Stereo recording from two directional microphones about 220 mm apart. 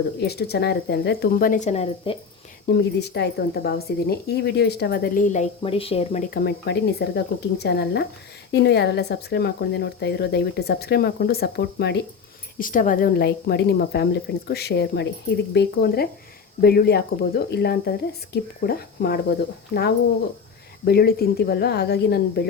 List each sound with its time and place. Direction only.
0.2 s speech: 45° left (ahead or behind); by 2.1 s 30° left (ahead or behind)
2.7 s speech: 45° left (ahead or behind); by 6.2 s 25° left (ahead or behind)
6.3 s speech: 45° left (ahead or behind)
12.5 s speech: 40° left (ahead or behind)
20.8 s speech: 45° left (ahead or behind)